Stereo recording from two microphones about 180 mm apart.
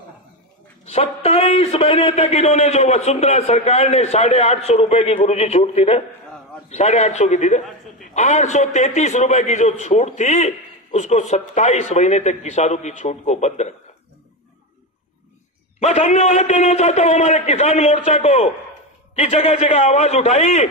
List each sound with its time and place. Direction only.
0.8 s a man's voice: 35° left (ahead or behind)
15.8 s a man's voice: 40° left (ahead or behind)